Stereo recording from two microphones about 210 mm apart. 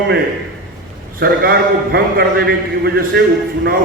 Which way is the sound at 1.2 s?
50° right (ahead or behind).